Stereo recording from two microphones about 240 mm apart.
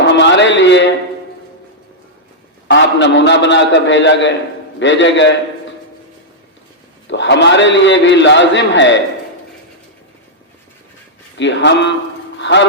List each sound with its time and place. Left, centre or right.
0.2 s a sound: left
2.6 s a man's voice: left
7.1 s a man's voice: left
11.3 s a man's voice: left